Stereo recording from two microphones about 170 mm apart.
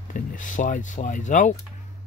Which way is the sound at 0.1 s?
50° left (ahead or behind).